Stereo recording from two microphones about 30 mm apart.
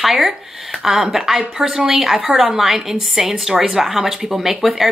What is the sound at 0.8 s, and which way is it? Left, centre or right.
A woman's voice, centre.